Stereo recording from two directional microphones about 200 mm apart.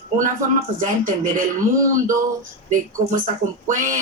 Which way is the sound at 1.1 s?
40° right (ahead or behind).